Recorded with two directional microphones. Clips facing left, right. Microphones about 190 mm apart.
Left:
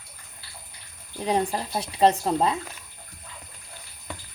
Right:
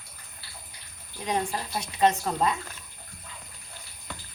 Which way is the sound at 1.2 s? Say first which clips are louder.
Left 4 dB; 30° left (ahead or behind).